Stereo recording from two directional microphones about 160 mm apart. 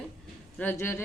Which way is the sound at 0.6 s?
10° left (ahead or behind).